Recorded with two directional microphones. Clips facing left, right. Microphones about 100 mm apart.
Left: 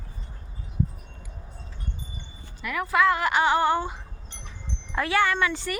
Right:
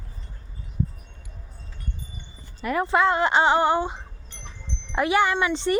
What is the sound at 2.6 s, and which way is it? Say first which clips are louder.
Speech: right 2 dB; 35° right (ahead or behind).